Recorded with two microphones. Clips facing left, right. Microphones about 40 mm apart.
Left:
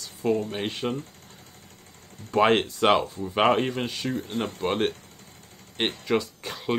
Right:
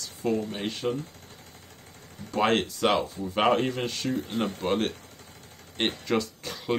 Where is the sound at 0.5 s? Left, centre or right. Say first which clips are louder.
Left 1 dB; left.